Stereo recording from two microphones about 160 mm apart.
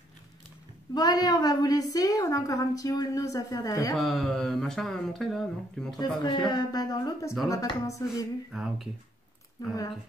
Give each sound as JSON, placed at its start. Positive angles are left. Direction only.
{"t": 0.9, "sound": "a woman's voice", "side_deg": 25}
{"t": 3.9, "sound": "speech", "side_deg": 0}
{"t": 5.9, "sound": "a woman's voice", "side_deg": 25}
{"t": 8.5, "sound": "speech", "side_deg": 0}
{"t": 9.6, "sound": "a woman's voice", "side_deg": 25}